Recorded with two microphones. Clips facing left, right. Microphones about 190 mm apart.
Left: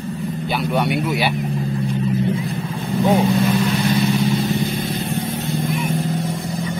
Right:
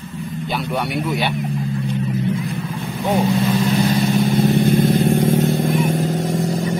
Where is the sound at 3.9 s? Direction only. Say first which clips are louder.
Right 1 dB; 45° right (ahead or behind).